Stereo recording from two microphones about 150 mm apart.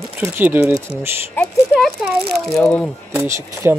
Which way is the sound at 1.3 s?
5° left (ahead or behind).